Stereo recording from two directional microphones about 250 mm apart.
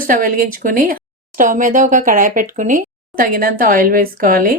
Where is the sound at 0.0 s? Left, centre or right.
Right.